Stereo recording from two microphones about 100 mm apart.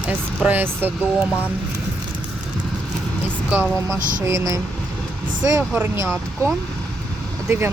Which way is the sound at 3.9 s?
30° right (ahead or behind).